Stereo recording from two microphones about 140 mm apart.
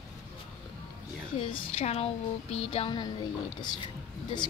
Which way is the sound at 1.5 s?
45° left (ahead or behind).